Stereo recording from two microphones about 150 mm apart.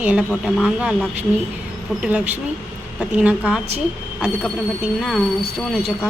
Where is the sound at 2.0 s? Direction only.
10° right (ahead or behind).